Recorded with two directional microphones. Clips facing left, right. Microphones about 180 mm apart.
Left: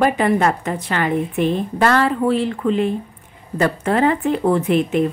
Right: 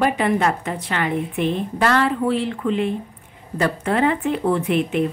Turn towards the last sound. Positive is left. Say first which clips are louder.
# left 3 dB
turn(degrees=40)  # may be behind; listen again after turning